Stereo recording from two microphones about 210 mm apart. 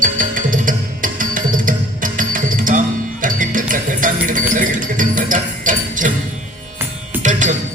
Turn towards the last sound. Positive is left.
turn(degrees=-35)  # may be behind; listen again after turning